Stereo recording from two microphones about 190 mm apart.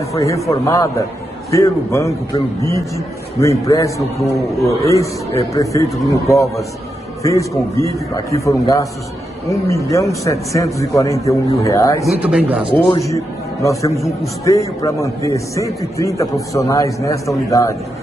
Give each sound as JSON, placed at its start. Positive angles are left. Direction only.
{"t": 0.2, "sound": "a man's voice", "side_deg": 15}
{"t": 12.1, "sound": "speech", "side_deg": -5}
{"t": 12.9, "sound": "a man's voice", "side_deg": 15}